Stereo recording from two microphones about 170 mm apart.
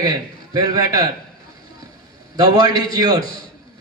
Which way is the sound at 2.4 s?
25° right (ahead or behind).